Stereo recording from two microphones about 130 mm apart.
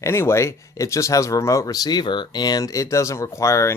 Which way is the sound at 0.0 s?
20° left (ahead or behind).